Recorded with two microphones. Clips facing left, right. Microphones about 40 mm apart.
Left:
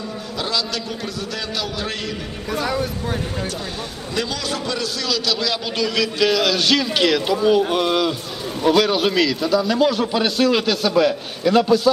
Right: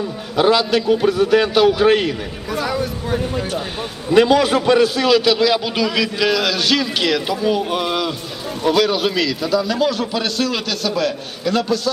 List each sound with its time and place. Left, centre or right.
0.3 s a man's voice: right
2.5 s a man's voice: centre
4.1 s a man's voice: right; by 11.8 s centre